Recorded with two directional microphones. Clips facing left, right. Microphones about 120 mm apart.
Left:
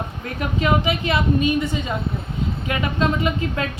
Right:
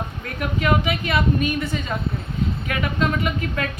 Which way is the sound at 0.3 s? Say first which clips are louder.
Left 1 dB; 25° left (ahead or behind).